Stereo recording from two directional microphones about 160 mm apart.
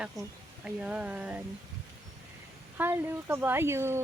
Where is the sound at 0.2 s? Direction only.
20° right (ahead or behind).